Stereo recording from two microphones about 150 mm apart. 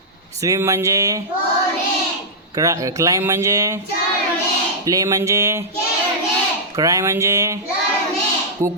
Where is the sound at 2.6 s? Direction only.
20° right (ahead or behind).